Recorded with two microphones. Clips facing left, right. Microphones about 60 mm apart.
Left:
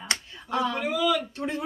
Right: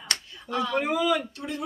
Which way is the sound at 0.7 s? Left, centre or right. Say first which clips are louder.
Right 4 dB; right.